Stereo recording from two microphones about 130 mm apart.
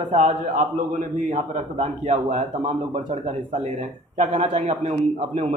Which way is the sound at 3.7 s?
60° right (ahead or behind).